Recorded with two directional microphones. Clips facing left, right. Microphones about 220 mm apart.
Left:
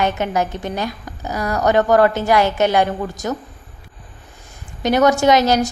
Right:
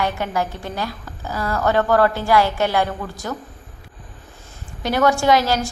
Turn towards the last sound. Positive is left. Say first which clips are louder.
# left 3 dB
turn(degrees=20)  # may be behind; listen again after turning